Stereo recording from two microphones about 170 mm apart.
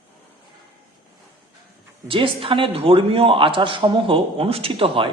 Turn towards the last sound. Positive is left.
turn(degrees=-35)  # may be behind; listen again after turning